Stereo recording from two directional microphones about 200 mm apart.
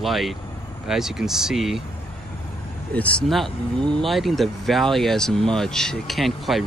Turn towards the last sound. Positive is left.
turn(degrees=0)  # may be behind; listen again after turning